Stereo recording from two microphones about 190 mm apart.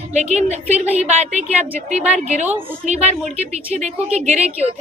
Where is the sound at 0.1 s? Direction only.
35° right (ahead or behind).